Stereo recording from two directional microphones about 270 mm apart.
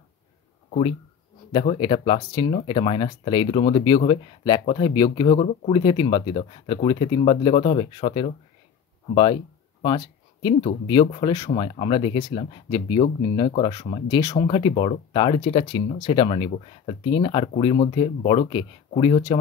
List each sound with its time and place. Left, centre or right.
0.7 s speech: left